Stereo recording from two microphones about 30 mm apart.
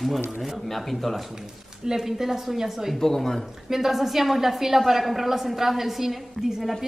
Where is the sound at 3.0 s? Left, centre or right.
Centre.